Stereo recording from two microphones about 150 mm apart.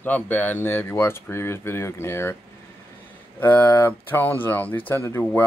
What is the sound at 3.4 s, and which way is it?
Speech, 15° left (ahead or behind).